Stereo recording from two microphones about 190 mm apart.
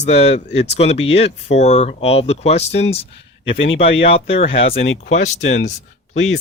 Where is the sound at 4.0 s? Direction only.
30° left (ahead or behind).